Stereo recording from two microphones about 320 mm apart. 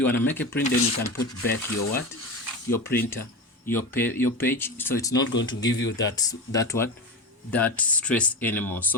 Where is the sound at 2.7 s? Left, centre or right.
Centre.